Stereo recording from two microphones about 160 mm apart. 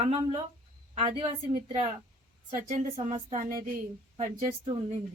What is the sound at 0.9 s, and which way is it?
Speech, 40° right (ahead or behind).